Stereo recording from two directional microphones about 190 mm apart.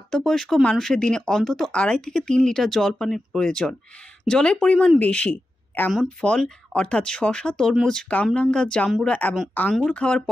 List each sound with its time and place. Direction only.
0.1 s speech: centre (ahead or behind)